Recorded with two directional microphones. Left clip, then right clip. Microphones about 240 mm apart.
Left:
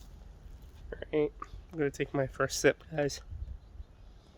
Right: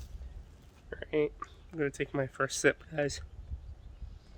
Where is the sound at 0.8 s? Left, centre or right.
Centre.